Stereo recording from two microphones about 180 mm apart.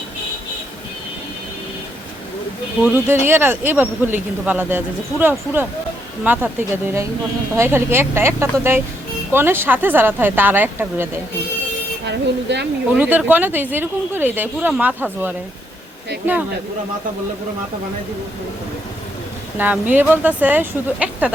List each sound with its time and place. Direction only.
2.8 s speech: 10° right (ahead or behind)
6.2 s speech: 10° right (ahead or behind)
12.0 s speech: 75° right (ahead or behind)
12.9 s speech: 10° right (ahead or behind)
19.5 s speech: 10° right (ahead or behind)